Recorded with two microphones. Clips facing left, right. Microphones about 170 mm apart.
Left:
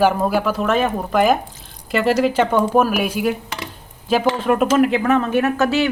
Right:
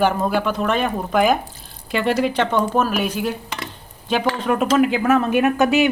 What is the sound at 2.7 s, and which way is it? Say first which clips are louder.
Stir: left 3 dB; 10° left (ahead or behind).